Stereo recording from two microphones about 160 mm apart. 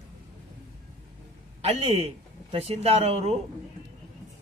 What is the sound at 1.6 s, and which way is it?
Speech, 40° right (ahead or behind).